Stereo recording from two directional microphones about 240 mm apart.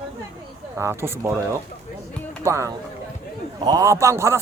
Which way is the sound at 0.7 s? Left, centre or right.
Centre.